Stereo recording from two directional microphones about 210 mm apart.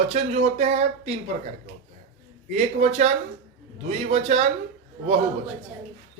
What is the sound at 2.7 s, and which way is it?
Speech, 30° right (ahead or behind).